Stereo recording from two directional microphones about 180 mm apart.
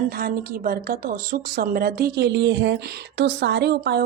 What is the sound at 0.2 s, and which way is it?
Speech, 55° right (ahead or behind).